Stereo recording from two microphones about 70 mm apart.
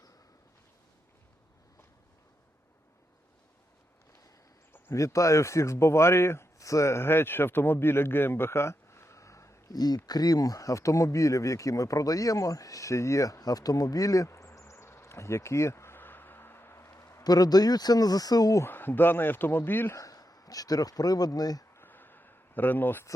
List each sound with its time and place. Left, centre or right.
4.9 s a man's voice: left
9.7 s speech: left
14.3 s insect: left
14.6 s a sound: left
17.2 s speech: left
18.6 s speech: left
19.9 s a man's voice: left
21.8 s a sound: left